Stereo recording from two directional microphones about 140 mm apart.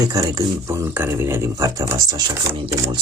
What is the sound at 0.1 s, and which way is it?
Speech, 25° right (ahead or behind).